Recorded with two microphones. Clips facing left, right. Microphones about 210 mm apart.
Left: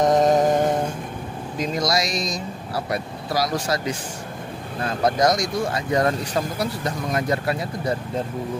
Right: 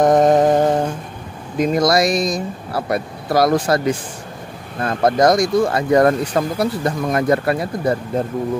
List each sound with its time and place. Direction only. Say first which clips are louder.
0.0 s music: right 4 dB; 55° right (ahead or behind)
1.6 s speech: right 8 dB; 55° right (ahead or behind)